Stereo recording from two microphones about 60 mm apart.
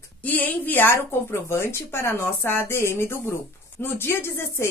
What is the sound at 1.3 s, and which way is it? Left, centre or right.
A woman's voice, left.